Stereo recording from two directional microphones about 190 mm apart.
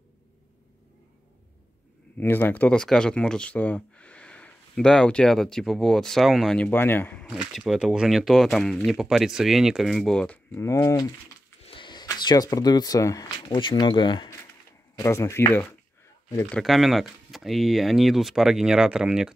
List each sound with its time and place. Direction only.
2.1 s speech: 10° left (ahead or behind)
7.2 s speech: 5° right (ahead or behind); by 11.1 s 15° left (ahead or behind)
11.6 s speech: 25° left (ahead or behind)
16.4 s speech: centre (ahead or behind)